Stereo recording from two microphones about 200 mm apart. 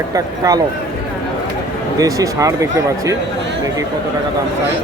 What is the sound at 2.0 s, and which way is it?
Speech, 15° right (ahead or behind).